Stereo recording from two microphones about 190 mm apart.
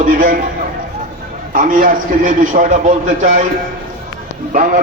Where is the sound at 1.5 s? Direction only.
45° right (ahead or behind).